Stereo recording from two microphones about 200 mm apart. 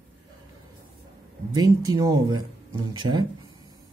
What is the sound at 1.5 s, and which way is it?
Speech, 15° right (ahead or behind).